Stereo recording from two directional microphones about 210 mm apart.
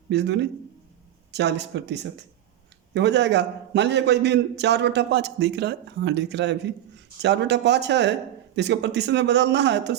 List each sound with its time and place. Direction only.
0.1 s a man's voice: 55° right (ahead or behind)